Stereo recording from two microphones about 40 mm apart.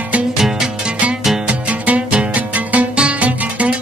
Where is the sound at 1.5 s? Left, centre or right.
Right.